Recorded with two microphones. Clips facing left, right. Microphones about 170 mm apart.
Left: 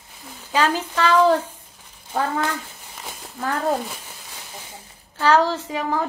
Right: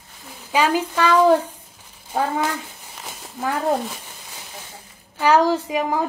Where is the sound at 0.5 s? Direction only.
10° right (ahead or behind).